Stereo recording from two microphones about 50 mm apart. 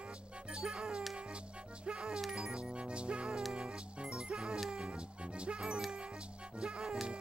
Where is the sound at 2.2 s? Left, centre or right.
Centre.